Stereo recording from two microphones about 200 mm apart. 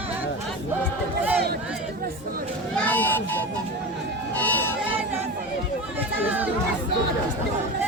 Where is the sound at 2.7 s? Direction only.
10° left (ahead or behind).